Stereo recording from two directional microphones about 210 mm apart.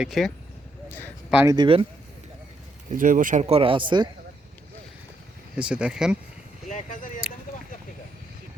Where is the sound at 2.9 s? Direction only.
40° right (ahead or behind); by 4.1 s 20° right (ahead or behind).